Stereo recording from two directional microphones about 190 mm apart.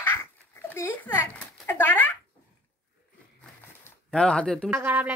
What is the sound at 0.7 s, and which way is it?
A child's voice, 10° left (ahead or behind).